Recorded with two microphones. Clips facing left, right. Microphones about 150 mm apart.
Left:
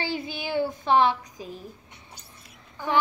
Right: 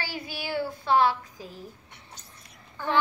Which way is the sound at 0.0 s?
20° left (ahead or behind).